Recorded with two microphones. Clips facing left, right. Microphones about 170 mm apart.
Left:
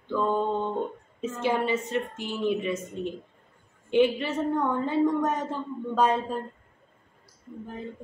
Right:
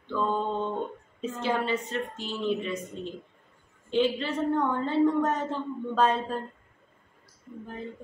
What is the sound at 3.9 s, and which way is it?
A woman's voice, 15° left (ahead or behind).